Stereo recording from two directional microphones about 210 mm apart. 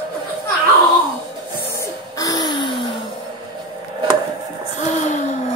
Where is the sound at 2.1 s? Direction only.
15° left (ahead or behind).